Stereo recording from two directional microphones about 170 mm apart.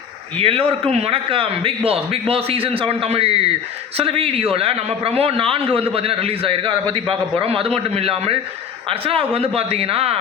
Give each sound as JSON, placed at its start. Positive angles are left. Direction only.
{"t": 0.3, "sound": "a man's voice", "side_deg": -35}